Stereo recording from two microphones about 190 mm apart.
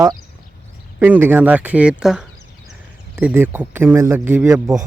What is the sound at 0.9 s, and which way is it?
Speech, 10° right (ahead or behind).